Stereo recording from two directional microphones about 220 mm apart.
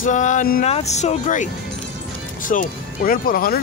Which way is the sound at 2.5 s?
40° left (ahead or behind).